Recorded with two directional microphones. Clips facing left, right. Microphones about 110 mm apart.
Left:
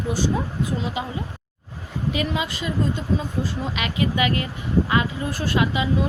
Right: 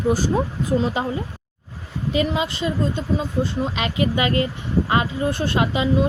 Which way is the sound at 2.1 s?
30° right (ahead or behind).